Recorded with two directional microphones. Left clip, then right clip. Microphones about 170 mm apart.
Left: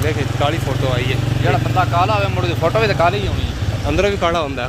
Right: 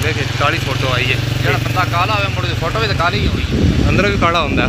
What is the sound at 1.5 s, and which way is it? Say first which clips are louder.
Speech: even; 55° left (ahead or behind).